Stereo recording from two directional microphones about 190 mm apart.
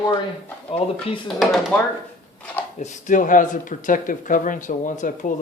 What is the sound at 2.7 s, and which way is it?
Speech, 40° left (ahead or behind).